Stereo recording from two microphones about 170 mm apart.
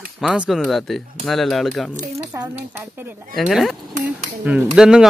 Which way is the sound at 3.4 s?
Centre (ahead or behind).